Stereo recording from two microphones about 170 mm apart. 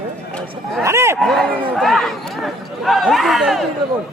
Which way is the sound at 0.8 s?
15° right (ahead or behind).